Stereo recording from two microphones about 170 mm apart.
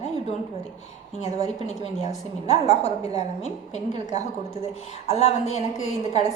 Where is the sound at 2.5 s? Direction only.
40° left (ahead or behind).